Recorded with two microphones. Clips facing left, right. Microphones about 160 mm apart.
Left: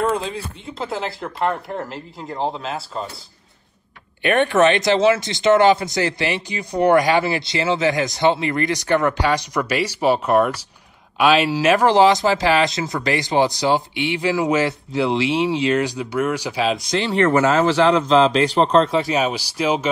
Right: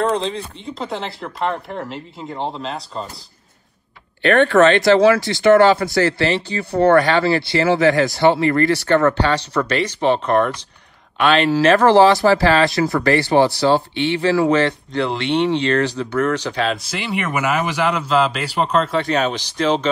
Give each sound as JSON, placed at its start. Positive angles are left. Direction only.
{"t": 0.1, "sound": "speech", "side_deg": 5}
{"t": 4.2, "sound": "speech", "side_deg": 15}
{"t": 16.9, "sound": "speech", "side_deg": -10}